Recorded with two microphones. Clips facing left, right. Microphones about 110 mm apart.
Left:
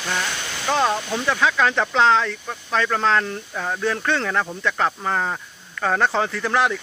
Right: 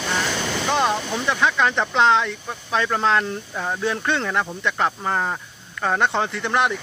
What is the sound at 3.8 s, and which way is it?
Speech, 20° right (ahead or behind).